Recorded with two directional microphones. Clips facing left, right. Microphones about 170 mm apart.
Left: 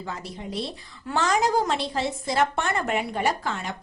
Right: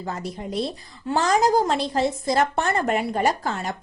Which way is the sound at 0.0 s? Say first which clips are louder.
Right 4 dB; 45° right (ahead or behind).